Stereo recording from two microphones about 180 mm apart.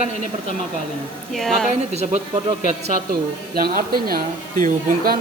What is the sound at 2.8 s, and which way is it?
Speech, 55° right (ahead or behind).